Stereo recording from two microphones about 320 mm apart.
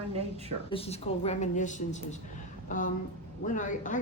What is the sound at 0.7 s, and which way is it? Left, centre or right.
Speech, centre.